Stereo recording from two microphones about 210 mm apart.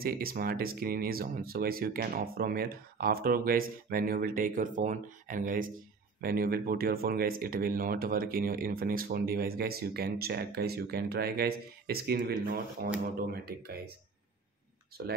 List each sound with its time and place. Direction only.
0.0 s speech: 45° right (ahead or behind)
15.0 s speech: 50° right (ahead or behind)